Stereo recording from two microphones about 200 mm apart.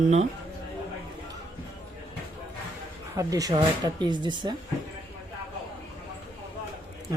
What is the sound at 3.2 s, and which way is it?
Speech, 15° right (ahead or behind).